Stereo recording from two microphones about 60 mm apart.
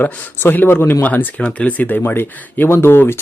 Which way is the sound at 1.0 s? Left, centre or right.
Left.